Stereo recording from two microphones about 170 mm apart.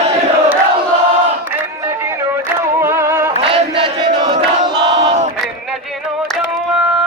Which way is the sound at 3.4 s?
30° right (ahead or behind).